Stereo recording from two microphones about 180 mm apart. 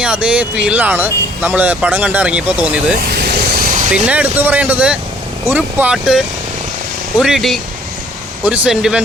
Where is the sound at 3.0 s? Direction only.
60° right (ahead or behind).